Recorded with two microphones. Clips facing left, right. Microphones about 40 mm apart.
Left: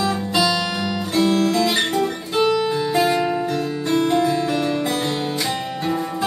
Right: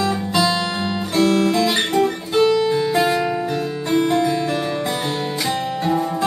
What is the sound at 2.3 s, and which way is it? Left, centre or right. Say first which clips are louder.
Music: right 2 dB; centre.